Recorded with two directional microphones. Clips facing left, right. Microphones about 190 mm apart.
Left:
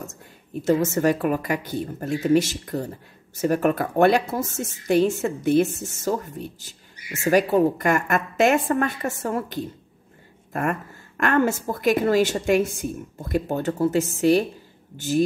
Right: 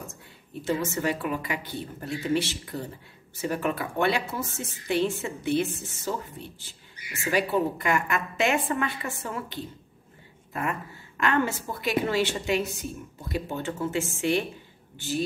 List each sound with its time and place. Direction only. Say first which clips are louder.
0.7 s speech: left 7 dB; 45° left (ahead or behind)